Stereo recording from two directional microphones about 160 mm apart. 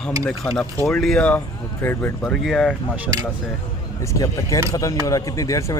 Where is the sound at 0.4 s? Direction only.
5° left (ahead or behind).